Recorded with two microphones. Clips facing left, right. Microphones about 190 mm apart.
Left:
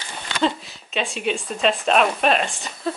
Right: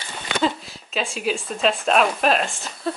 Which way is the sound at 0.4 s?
Centre (ahead or behind).